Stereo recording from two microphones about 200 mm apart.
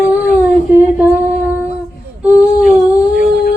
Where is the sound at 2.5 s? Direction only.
40° left (ahead or behind).